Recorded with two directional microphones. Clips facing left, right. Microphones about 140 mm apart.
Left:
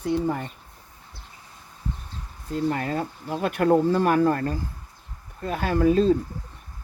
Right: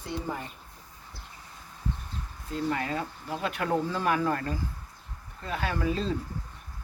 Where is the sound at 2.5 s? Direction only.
45° left (ahead or behind).